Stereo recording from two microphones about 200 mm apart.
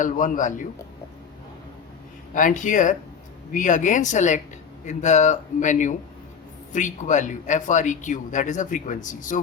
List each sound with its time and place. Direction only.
0.0 s speech: 40° left (ahead or behind)
2.3 s speech: 40° left (ahead or behind)